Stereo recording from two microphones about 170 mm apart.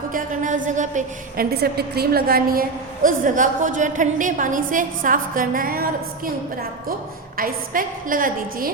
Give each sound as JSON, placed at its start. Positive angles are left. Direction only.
{"t": 0.1, "sound": "a woman's voice", "side_deg": -50}
{"t": 1.5, "sound": "a woman's voice", "side_deg": -65}